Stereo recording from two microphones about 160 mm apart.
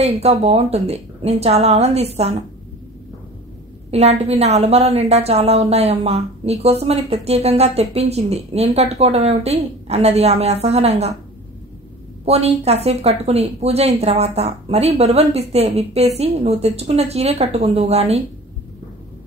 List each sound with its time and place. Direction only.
0.0 s a woman's voice: 40° right (ahead or behind)
3.9 s a woman's voice: 40° right (ahead or behind)
12.3 s a woman's voice: 40° right (ahead or behind)